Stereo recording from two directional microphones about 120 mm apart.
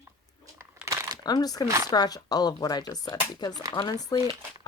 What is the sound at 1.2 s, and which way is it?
Speech, 35° left (ahead or behind).